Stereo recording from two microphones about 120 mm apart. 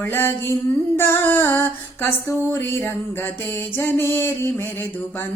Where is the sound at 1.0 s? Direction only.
20° left (ahead or behind).